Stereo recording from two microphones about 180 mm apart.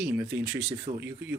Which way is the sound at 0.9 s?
40° right (ahead or behind).